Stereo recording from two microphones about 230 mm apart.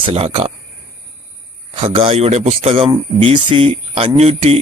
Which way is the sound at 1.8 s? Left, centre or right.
Right.